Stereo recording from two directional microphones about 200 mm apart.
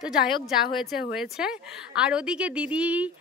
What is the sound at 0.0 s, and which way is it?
A woman's voice, 5° right (ahead or behind).